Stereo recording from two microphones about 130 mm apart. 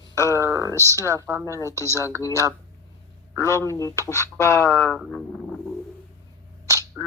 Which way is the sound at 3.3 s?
20° left (ahead or behind).